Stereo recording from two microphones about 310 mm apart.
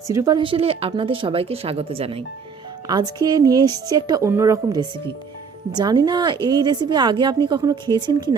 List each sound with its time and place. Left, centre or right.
0.1 s a woman's voice: centre